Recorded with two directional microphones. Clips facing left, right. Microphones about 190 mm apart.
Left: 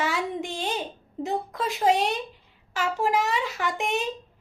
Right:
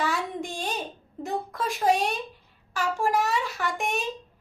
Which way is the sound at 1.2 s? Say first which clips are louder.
Left 2 dB; 20° left (ahead or behind).